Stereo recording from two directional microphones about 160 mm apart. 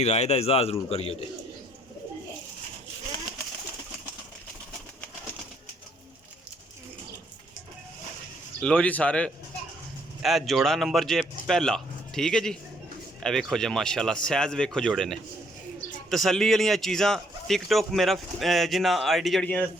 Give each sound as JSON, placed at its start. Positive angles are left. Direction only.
{"t": 0.0, "sound": "speech", "side_deg": 45}
{"t": 8.6, "sound": "a man's voice", "side_deg": 5}